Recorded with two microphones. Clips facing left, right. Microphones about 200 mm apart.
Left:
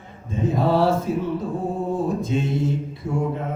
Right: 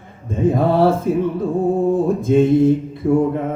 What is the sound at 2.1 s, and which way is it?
Mantra, 55° right (ahead or behind).